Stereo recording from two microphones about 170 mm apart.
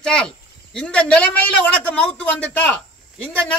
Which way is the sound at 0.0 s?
5° left (ahead or behind).